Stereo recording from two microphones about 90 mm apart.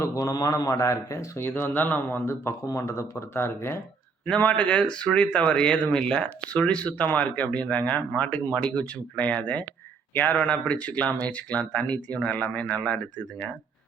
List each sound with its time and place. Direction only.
0.0 s speech: 40° left (ahead or behind)
1.4 s speech: 25° left (ahead or behind)
4.3 s speech: 15° left (ahead or behind)